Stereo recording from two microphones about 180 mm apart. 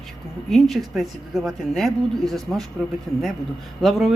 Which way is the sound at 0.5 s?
Centre (ahead or behind).